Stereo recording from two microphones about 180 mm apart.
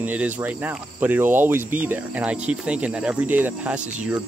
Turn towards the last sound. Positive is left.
turn(degrees=-10)  # may be behind; listen again after turning